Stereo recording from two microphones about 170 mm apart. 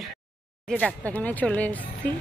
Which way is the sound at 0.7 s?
5° left (ahead or behind).